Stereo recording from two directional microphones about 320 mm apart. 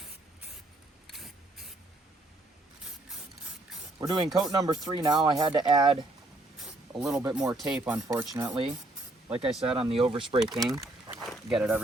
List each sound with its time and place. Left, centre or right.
3.9 s speech: centre
7.0 s speech: centre
9.9 s speech: centre
10.4 s speech: centre
10.7 s a sound: centre
11.3 s speech: centre